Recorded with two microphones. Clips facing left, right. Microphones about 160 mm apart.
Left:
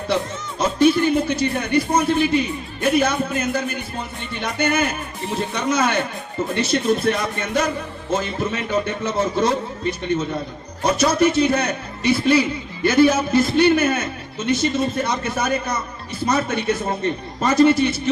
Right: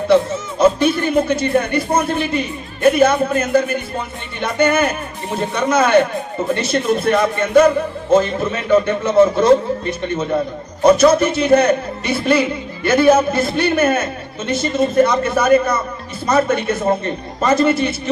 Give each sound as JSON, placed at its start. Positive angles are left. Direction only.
{"t": 0.6, "sound": "a man's voice", "side_deg": -55}